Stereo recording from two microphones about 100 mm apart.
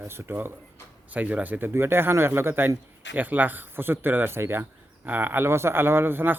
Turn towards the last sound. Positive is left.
turn(degrees=-20)  # may be behind; listen again after turning